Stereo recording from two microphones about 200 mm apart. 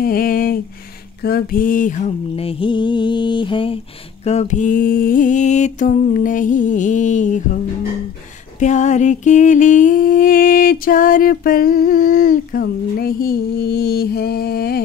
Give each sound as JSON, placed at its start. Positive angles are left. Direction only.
{"t": 0.0, "sound": "a sound", "side_deg": 45}
{"t": 1.2, "sound": "mantra", "side_deg": 50}
{"t": 8.5, "sound": "humming", "side_deg": 35}